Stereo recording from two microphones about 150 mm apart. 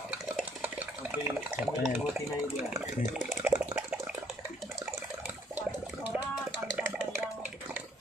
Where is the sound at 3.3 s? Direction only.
10° right (ahead or behind).